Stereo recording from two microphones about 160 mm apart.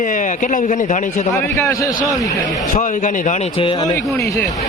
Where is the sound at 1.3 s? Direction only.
20° left (ahead or behind).